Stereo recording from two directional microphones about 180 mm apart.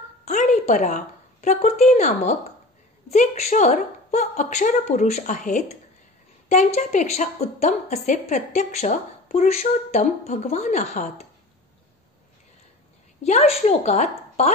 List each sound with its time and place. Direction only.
0.2 s a woman's voice: 40° left (ahead or behind)
13.2 s a woman's voice: 35° left (ahead or behind)